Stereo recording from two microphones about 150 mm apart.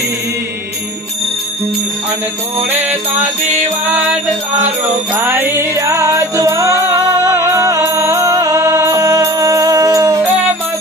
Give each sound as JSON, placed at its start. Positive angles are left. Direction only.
{"t": 2.7, "sound": "music", "side_deg": -10}
{"t": 5.2, "sound": "music", "side_deg": -15}